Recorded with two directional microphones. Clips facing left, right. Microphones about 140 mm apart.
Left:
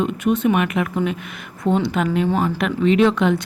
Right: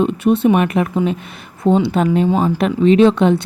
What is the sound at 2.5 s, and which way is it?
Speech, 35° right (ahead or behind).